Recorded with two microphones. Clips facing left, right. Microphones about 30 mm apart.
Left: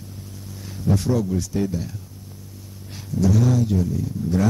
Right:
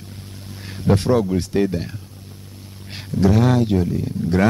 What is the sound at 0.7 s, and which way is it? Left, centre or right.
Speech, right.